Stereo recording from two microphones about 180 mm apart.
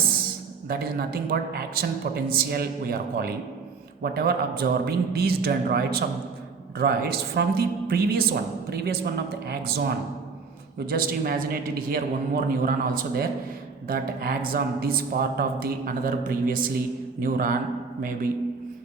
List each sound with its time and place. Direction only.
0.7 s speech: 60° right (ahead or behind)
10.8 s a man's voice: 55° right (ahead or behind)